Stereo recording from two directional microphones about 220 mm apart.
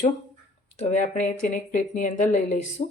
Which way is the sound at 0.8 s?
35° left (ahead or behind).